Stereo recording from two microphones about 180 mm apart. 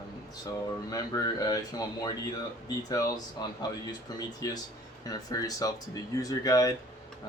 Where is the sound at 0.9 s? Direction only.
20° left (ahead or behind).